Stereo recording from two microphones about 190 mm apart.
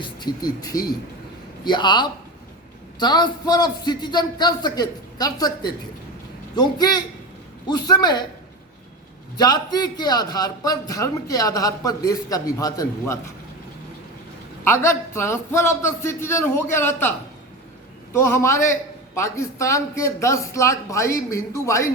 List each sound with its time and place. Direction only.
0.0 s a man's voice: 20° left (ahead or behind)
9.4 s a man's voice: 20° left (ahead or behind)
14.6 s a man's voice: 15° left (ahead or behind)